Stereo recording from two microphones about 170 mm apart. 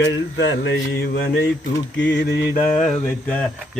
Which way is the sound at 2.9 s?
5° left (ahead or behind).